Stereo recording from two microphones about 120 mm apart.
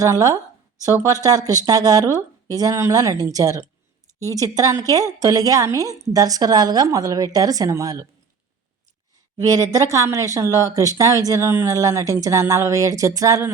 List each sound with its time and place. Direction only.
0.0 s a woman's voice: 30° right (ahead or behind)
9.4 s speech: 30° right (ahead or behind)